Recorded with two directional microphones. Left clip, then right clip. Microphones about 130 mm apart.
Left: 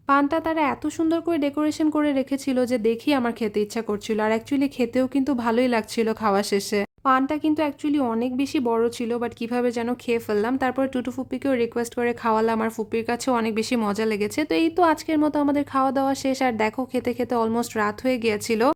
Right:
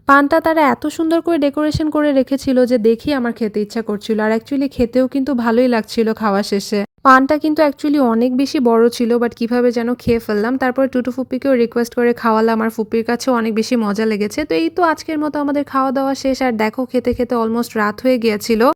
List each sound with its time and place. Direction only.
0.1 s speech: 50° right (ahead or behind); by 6.8 s 30° right (ahead or behind)
7.0 s speech: 55° right (ahead or behind); by 18.7 s 35° right (ahead or behind)